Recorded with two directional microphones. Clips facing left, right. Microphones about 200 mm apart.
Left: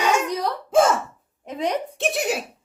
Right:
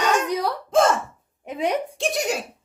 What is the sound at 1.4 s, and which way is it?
Speech, 10° right (ahead or behind).